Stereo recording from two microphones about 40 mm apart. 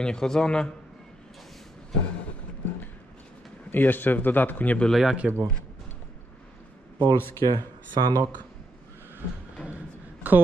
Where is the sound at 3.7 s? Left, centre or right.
Left.